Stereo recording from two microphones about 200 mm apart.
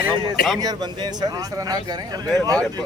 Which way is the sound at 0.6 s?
20° right (ahead or behind).